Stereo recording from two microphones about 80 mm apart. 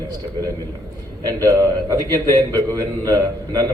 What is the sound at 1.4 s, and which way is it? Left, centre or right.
A man's voice, right.